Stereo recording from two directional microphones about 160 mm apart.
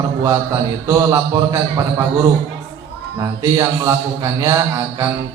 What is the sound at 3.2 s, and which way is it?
A man's voice, 25° right (ahead or behind).